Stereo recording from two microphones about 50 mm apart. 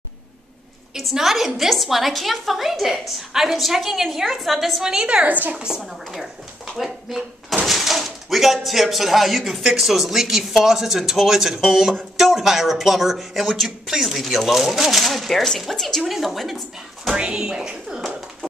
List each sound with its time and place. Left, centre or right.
0.9 s speech: centre
4.8 s a woman's voice: centre
6.8 s a woman's voice: centre
16.1 s speech: centre
17.1 s speech: centre